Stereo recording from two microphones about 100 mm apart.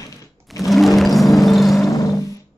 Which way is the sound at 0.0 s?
35° left (ahead or behind).